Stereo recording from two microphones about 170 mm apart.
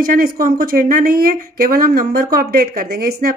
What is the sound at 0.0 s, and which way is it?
Speech, 55° right (ahead or behind).